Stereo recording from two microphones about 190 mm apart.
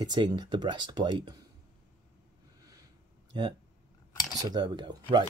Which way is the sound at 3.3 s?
25° right (ahead or behind).